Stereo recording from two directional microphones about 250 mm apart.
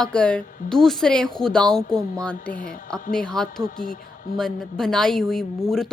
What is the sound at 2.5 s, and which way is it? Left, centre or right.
Speech, left.